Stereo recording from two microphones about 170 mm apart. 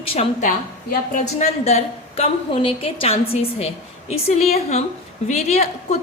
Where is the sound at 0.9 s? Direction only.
45° left (ahead or behind).